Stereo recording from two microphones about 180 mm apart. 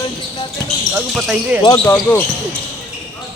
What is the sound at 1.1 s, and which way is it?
Speech, 5° right (ahead or behind).